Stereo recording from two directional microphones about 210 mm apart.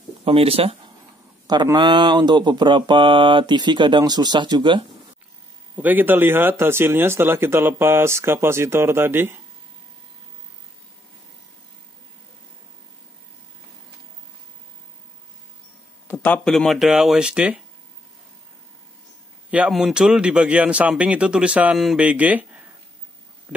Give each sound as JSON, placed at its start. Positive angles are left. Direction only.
{"t": 0.2, "sound": "speech", "side_deg": -25}
{"t": 1.5, "sound": "mantra", "side_deg": -20}
{"t": 5.8, "sound": "speech", "side_deg": -10}
{"t": 16.1, "sound": "speech", "side_deg": 5}
{"t": 19.5, "sound": "speech", "side_deg": -5}